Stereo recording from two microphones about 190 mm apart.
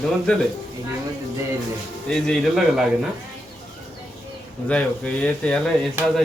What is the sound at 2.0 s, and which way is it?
Speech, 5° left (ahead or behind).